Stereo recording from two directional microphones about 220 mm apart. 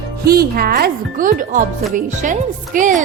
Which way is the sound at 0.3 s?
45° right (ahead or behind).